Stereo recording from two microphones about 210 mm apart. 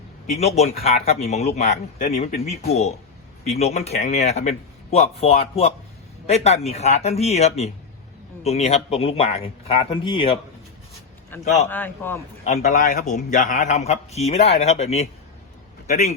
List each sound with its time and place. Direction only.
0.3 s a man's voice: 30° left (ahead or behind)
11.3 s a man's voice: 10° left (ahead or behind)
12.5 s a man's voice: 35° left (ahead or behind)